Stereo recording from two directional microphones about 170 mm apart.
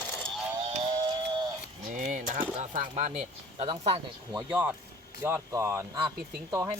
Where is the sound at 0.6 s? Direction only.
30° right (ahead or behind).